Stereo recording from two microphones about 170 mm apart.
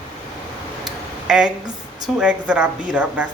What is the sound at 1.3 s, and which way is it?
Speech, 5° right (ahead or behind).